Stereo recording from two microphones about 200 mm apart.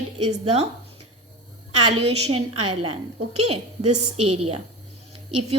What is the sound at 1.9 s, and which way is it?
A woman's voice, 30° right (ahead or behind).